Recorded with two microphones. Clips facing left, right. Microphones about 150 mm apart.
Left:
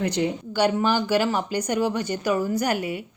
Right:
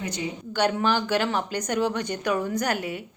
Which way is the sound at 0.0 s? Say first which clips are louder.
Left 8 dB; 60° left (ahead or behind).